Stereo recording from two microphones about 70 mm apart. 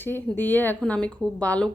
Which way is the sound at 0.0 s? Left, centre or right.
Left.